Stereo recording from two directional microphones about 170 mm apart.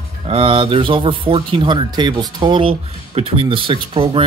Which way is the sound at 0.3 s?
30° right (ahead or behind).